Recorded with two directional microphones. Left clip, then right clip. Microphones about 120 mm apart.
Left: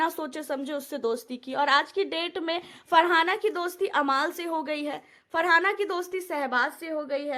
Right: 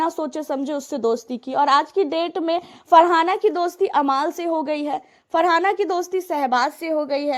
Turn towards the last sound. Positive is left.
turn(degrees=-65)  # may be behind; listen again after turning